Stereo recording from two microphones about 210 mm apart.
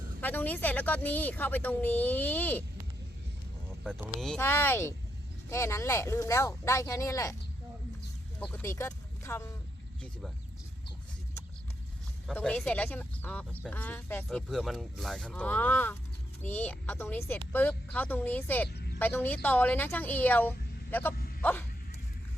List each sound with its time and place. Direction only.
0.2 s speech: 10° left (ahead or behind)
4.2 s speech: 5° left (ahead or behind)
8.4 s speech: 10° left (ahead or behind)
12.3 s speech: 5° left (ahead or behind)
18.7 s a sound: 50° left (ahead or behind)
18.9 s speech: 10° left (ahead or behind)